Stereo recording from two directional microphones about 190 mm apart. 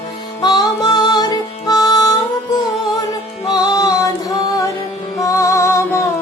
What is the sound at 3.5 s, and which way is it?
Music, 20° left (ahead or behind).